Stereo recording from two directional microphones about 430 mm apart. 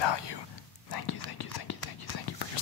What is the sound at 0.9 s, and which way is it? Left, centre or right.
Whispering, left.